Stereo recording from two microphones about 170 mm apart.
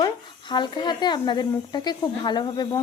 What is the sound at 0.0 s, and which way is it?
A woman's voice, 25° left (ahead or behind).